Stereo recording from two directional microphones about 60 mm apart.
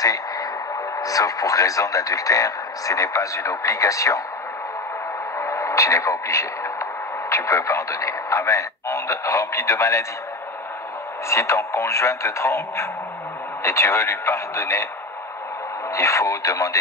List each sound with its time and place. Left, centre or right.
0.0 s a sound: left
0.9 s speech: left
5.4 s speech: left
11.2 s speech: left
15.9 s speech: left